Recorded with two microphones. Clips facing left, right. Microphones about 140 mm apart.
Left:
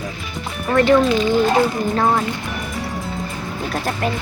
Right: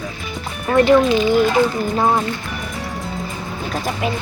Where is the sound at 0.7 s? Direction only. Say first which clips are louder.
Right 1 dB; 15° right (ahead or behind).